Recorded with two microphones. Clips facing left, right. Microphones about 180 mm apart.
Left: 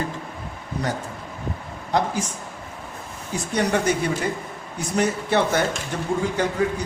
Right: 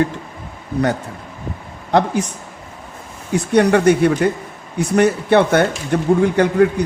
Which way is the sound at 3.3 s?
65° right (ahead or behind).